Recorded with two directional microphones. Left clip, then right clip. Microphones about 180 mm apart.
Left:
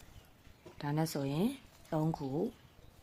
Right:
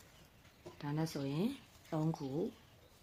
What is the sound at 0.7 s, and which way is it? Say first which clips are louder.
Speech: left 5 dB; 35° left (ahead or behind).